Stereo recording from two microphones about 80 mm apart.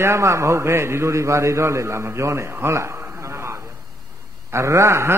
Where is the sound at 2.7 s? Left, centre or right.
Right.